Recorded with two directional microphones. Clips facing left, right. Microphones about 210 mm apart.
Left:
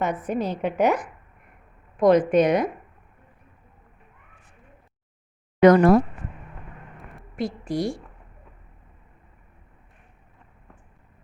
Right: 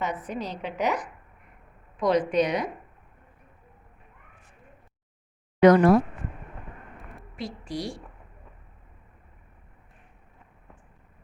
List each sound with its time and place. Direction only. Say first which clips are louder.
0.0 s a woman's voice: left 6 dB; 50° left (ahead or behind)
5.5 s speech: left 2 dB; 50° left (ahead or behind)
7.3 s a woman's voice: left 7 dB; 50° left (ahead or behind)